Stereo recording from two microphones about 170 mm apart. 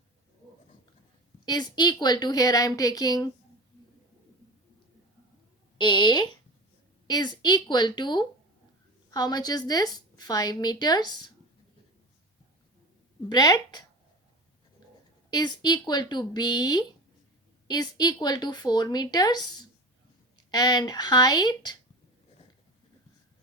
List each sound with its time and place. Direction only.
1.5 s a woman's voice: 25° left (ahead or behind)
5.7 s a woman's voice: 25° left (ahead or behind)
13.2 s a woman's voice: 25° left (ahead or behind)
15.3 s a woman's voice: 25° left (ahead or behind)